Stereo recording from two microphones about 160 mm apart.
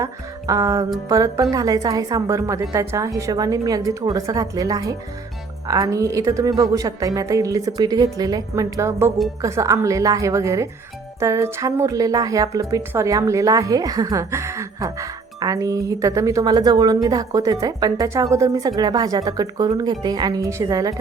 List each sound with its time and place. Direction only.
0.0 s speech: 20° right (ahead or behind)